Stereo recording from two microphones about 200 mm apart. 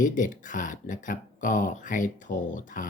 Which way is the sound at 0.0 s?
40° left (ahead or behind).